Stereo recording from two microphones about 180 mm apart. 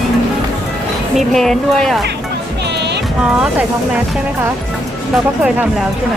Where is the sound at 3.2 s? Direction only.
5° right (ahead or behind).